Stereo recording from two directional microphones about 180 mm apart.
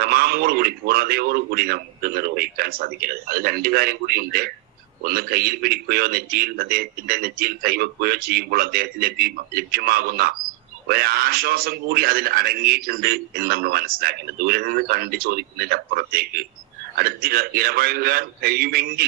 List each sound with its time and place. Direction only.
0.0 s a man's voice: 60° right (ahead or behind)